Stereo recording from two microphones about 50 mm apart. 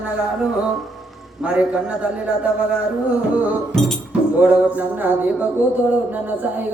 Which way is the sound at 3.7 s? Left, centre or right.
Centre.